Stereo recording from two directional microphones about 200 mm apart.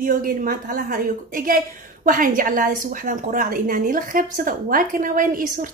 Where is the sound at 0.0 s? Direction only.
45° right (ahead or behind).